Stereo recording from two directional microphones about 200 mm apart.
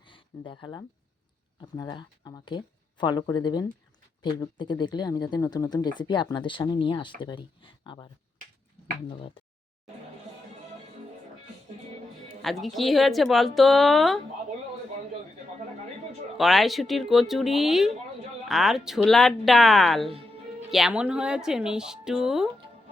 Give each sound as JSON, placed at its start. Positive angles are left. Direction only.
{"t": 0.1, "sound": "speech", "side_deg": 25}
{"t": 12.4, "sound": "speech", "side_deg": 0}
{"t": 16.4, "sound": "speech", "side_deg": 0}
{"t": 20.1, "sound": "music", "side_deg": -30}
{"t": 20.7, "sound": "speech", "side_deg": 0}